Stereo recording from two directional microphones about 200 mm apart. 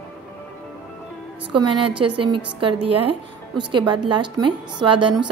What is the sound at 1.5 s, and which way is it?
A woman's voice, 25° right (ahead or behind).